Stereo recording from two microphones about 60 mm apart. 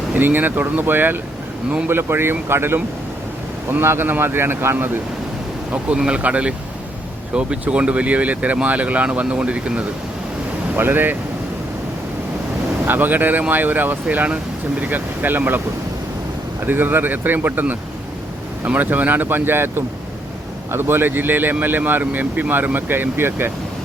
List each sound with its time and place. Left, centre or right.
0.2 s speech: right
6.1 s speech: right
10.8 s speech: right
12.8 s speech: right
16.6 s speech: right